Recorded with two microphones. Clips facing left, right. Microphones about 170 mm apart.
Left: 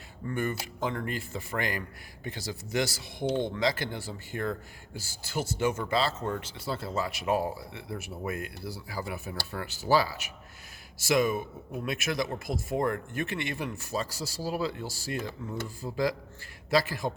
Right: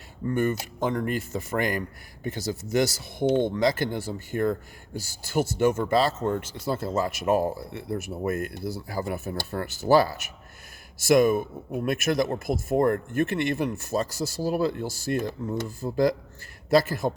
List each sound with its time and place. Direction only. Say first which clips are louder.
0.3 s a man's voice: right 6 dB; 45° right (ahead or behind)